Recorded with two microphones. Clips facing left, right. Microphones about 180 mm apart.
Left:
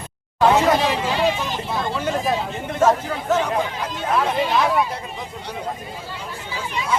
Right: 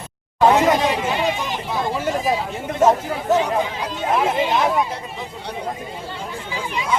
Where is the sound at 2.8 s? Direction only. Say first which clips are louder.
Right 2 dB; 15° right (ahead or behind).